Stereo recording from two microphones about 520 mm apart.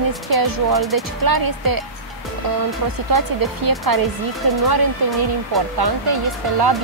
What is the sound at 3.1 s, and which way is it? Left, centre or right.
Speech, right.